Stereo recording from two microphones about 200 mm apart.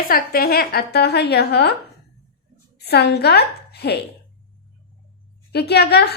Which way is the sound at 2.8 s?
55° left (ahead or behind).